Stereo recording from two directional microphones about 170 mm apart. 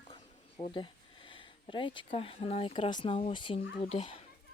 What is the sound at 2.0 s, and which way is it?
Speech, 35° left (ahead or behind).